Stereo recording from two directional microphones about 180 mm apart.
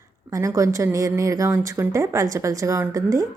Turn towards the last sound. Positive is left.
turn(degrees=-20)  # may be behind; listen again after turning